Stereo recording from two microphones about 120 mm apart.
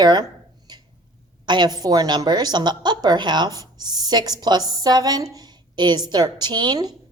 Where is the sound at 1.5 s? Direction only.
35° right (ahead or behind).